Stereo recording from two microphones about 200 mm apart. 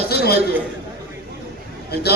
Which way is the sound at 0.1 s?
50° left (ahead or behind).